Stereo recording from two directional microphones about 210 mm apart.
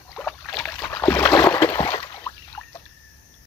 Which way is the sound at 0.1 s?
5° left (ahead or behind).